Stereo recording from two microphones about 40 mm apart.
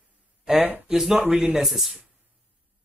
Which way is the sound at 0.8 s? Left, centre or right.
Centre.